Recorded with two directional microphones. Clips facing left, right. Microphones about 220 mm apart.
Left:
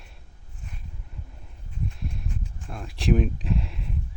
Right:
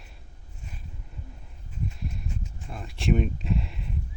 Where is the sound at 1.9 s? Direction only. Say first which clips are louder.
Left 1 dB; centre (ahead or behind).